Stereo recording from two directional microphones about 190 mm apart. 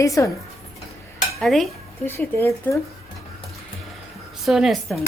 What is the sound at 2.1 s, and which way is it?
Speech, 10° left (ahead or behind).